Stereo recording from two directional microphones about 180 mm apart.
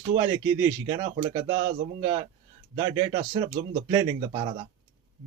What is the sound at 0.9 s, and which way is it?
Speech, 25° right (ahead or behind).